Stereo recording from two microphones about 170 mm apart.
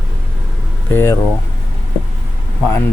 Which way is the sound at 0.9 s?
15° left (ahead or behind).